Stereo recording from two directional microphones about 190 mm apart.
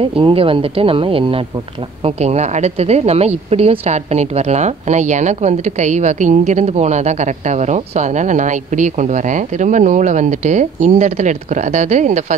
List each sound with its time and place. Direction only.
0.0 s a woman's voice: 30° right (ahead or behind)